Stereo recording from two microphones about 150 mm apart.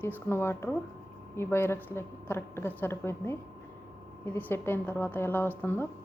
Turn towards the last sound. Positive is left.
turn(degrees=15)  # may be behind; listen again after turning